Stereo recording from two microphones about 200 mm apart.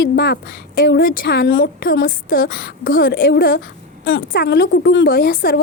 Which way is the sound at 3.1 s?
50° left (ahead or behind).